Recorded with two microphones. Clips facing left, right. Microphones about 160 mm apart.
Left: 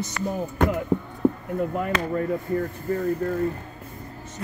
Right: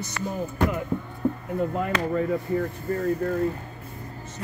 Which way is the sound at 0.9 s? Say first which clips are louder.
Left 5 dB; 90° left.